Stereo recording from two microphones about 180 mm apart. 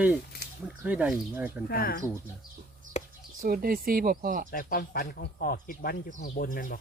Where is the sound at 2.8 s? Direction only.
45° right (ahead or behind).